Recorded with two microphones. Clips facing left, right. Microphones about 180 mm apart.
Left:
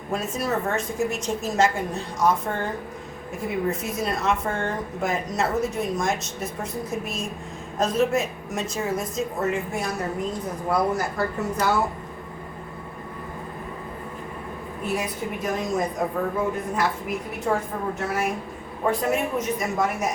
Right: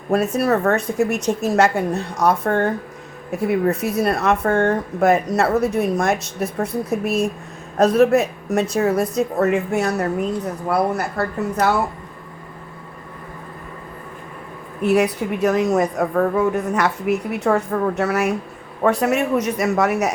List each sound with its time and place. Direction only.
0.1 s a woman's voice: 65° right (ahead or behind)
3.7 s a woman's voice: 65° right (ahead or behind)
7.8 s a woman's voice: 65° right (ahead or behind)
14.8 s a woman's voice: 70° right (ahead or behind)